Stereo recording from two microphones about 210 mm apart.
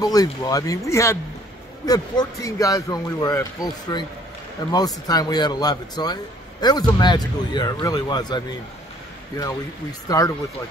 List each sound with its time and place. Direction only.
0.0 s a man's voice: 15° left (ahead or behind)
9.4 s a man's voice: 15° left (ahead or behind)